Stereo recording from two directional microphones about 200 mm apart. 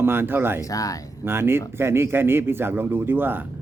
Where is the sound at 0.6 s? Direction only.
15° left (ahead or behind).